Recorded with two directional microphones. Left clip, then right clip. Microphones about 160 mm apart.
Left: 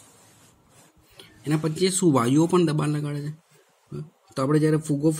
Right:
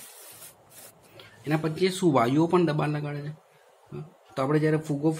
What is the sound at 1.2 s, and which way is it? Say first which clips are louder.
Speech: left 1 dB; 40° left (ahead or behind).